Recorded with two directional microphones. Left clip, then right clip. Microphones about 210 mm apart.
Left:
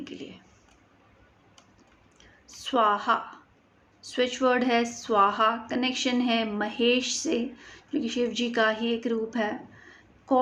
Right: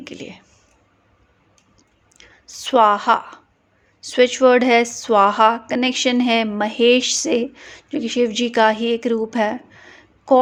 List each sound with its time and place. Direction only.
0.0 s speech: 45° right (ahead or behind)
2.1 s a sound: 45° right (ahead or behind)
4.0 s a woman's voice: 45° right (ahead or behind)